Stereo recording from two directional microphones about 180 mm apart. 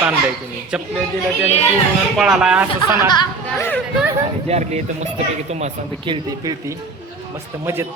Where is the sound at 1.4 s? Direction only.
35° left (ahead or behind).